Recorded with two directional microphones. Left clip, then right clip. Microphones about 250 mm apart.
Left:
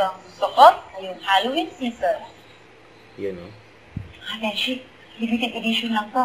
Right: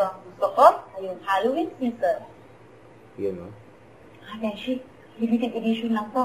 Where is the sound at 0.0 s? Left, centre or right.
Centre.